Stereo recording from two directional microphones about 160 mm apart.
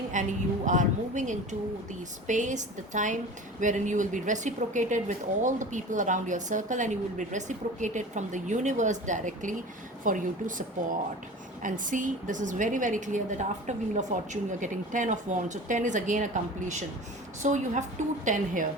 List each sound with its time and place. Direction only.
0.1 s speech: 50° right (ahead or behind)